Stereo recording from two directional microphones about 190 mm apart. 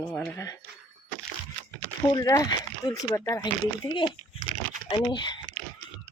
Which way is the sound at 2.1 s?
15° left (ahead or behind).